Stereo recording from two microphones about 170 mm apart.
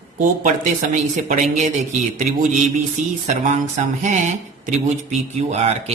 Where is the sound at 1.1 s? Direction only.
45° right (ahead or behind).